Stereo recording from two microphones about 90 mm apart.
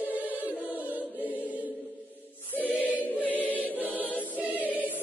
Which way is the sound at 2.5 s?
20° left (ahead or behind).